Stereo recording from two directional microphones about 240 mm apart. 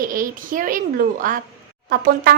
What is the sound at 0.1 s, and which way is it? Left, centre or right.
Speech, right.